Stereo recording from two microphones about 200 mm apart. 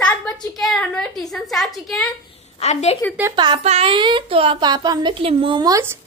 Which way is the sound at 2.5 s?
30° left (ahead or behind).